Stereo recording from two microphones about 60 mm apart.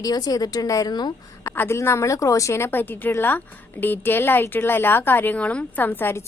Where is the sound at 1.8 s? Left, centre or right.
Left.